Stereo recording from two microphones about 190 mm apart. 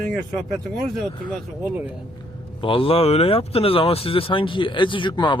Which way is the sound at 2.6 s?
25° left (ahead or behind).